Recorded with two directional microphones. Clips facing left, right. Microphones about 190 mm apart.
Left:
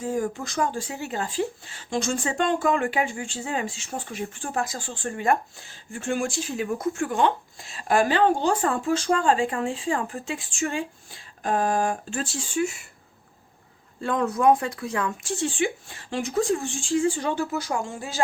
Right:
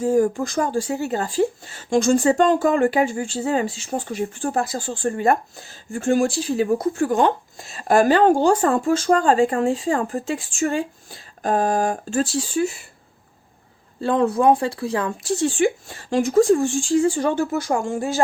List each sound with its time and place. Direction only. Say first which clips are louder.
0.0 s speech: right 9 dB; 45° right (ahead or behind)
14.0 s speech: right 4 dB; 30° right (ahead or behind); by 18.2 s 45° right (ahead or behind)